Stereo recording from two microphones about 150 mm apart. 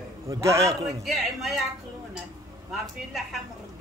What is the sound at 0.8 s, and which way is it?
Speech, centre (ahead or behind).